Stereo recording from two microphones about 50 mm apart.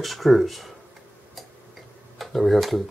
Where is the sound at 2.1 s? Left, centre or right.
Centre.